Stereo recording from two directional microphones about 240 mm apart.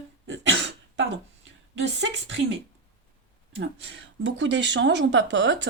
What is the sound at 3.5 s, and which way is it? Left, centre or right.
A woman's voice, right.